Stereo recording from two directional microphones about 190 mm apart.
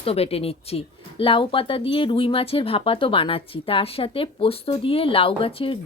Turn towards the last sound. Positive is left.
turn(degrees=30)  # may be behind; listen again after turning